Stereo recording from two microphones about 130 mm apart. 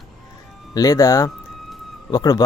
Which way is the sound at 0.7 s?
25° left (ahead or behind).